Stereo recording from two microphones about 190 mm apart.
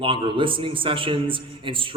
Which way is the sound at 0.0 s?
25° right (ahead or behind).